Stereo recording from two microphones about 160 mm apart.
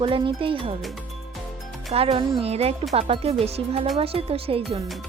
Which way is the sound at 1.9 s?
35° right (ahead or behind).